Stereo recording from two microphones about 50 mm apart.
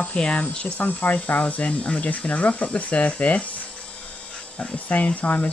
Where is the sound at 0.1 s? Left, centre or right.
Left.